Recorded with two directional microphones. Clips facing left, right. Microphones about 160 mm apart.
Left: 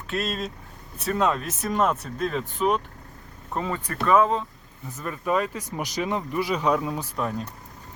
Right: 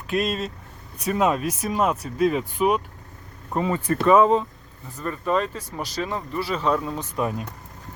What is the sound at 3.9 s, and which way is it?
Speech, 25° right (ahead or behind).